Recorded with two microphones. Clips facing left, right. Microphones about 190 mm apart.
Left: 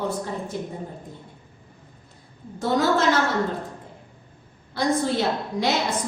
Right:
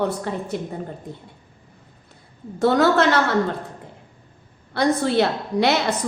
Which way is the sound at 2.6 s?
65° right (ahead or behind).